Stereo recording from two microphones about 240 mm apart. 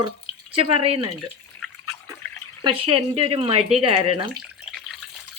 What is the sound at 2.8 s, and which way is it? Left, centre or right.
Speech, right.